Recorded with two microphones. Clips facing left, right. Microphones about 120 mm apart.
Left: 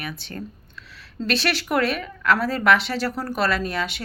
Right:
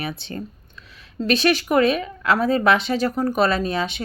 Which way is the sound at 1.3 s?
15° right (ahead or behind).